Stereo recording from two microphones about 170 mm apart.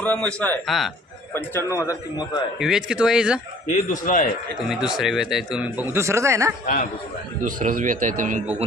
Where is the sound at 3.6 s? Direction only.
50° left (ahead or behind).